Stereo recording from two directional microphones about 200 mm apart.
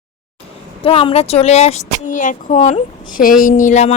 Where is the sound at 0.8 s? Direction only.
25° left (ahead or behind).